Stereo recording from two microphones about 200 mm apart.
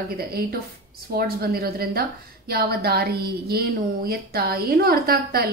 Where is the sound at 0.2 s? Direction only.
50° right (ahead or behind).